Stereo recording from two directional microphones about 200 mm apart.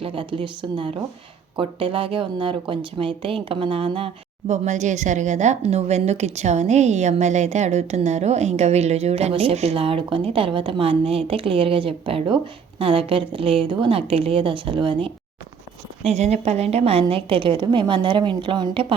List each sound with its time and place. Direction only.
0.0 s a woman's voice: 25° right (ahead or behind)
16.1 s a woman's voice: 35° right (ahead or behind)